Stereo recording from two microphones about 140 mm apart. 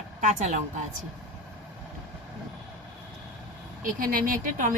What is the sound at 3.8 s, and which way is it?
Speech, 85° right.